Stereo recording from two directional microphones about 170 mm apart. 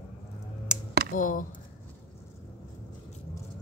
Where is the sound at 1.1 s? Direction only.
50° left (ahead or behind).